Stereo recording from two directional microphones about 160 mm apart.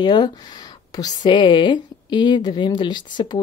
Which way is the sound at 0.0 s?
25° left (ahead or behind).